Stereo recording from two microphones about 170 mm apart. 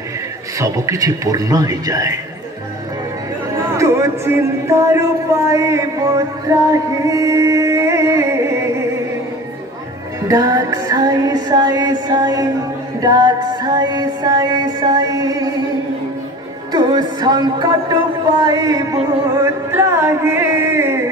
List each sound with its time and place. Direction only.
0.6 s music: 20° right (ahead or behind)
3.6 s speech: 15° right (ahead or behind)
6.7 s music: 20° right (ahead or behind)
10.2 s music: 20° right (ahead or behind)
16.7 s music: 25° right (ahead or behind)